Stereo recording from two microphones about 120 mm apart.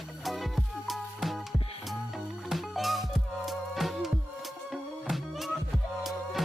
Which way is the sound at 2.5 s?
Centre (ahead or behind).